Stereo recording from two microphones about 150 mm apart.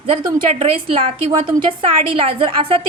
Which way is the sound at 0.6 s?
40° right (ahead or behind).